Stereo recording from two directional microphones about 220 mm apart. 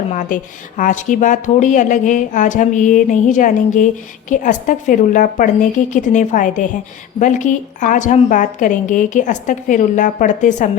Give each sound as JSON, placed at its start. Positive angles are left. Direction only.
{"t": 0.1, "sound": "a woman's voice", "side_deg": 35}